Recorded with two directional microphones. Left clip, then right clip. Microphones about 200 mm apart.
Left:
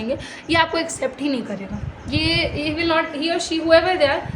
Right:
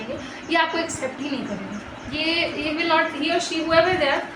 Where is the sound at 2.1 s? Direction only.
55° left (ahead or behind).